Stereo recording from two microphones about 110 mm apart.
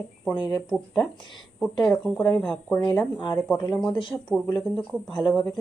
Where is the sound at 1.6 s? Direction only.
5° left (ahead or behind).